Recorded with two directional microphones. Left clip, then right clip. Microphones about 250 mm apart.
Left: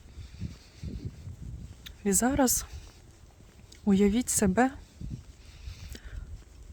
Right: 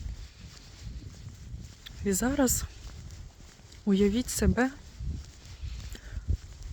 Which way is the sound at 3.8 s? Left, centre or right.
Centre.